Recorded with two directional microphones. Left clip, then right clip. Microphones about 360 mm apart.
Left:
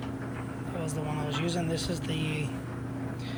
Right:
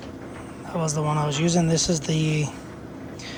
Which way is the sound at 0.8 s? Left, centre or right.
Right.